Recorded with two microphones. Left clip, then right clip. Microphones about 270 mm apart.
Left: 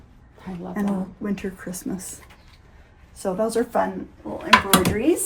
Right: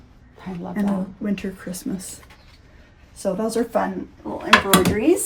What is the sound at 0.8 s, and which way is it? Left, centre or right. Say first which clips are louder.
Speech: right 2 dB; centre.